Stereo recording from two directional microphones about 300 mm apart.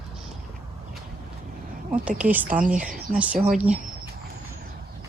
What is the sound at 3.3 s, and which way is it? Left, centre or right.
Speech, right.